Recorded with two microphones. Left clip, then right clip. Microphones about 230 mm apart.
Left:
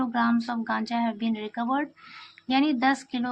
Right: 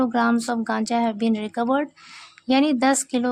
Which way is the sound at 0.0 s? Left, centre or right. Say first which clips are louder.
Right 5 dB; right.